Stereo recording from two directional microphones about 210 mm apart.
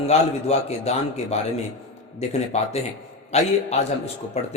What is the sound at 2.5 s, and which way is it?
Speech, 30° left (ahead or behind).